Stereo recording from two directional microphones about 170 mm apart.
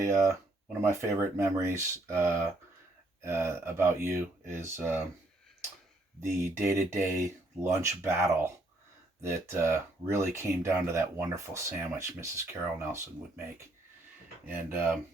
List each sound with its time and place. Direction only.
0.0 s speech: 15° right (ahead or behind)
6.1 s speech: 15° right (ahead or behind)